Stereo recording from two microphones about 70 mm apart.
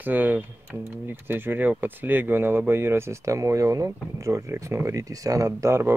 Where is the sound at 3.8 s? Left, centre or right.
Right.